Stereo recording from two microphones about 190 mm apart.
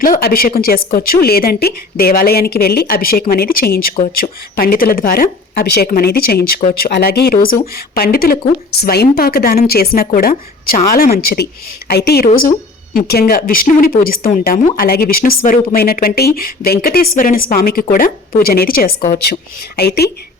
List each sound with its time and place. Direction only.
0.0 s speech: 50° left (ahead or behind)